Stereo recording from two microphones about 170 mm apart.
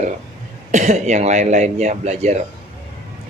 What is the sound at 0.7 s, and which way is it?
A man's voice, 45° right (ahead or behind).